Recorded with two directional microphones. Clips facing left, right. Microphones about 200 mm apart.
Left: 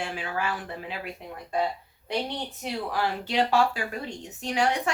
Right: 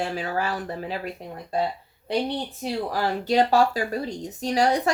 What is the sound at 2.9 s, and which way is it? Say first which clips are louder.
A woman's voice: right 5 dB; 40° right (ahead or behind).